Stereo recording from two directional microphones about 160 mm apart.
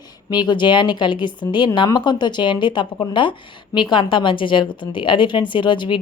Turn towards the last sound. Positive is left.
turn(degrees=30)  # may be behind; listen again after turning